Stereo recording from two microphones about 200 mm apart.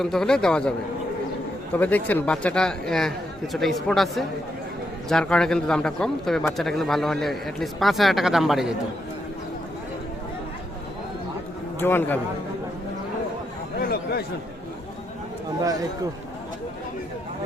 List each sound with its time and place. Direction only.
0.0 s speech: centre (ahead or behind)
1.7 s speech: 10° left (ahead or behind)
11.8 s a man's voice: 10° left (ahead or behind)
13.7 s speech: 50° left (ahead or behind)